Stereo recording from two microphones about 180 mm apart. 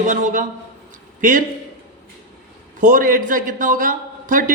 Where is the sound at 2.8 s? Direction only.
50° right (ahead or behind).